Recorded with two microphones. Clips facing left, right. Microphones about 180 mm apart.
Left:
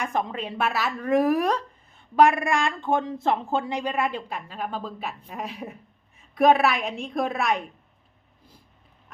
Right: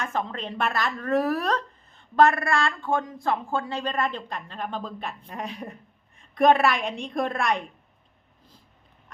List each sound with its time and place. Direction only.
0.0 s a woman's voice: 15° left (ahead or behind)